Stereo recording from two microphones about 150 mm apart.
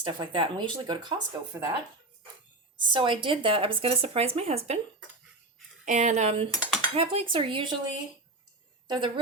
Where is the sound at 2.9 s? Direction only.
35° right (ahead or behind).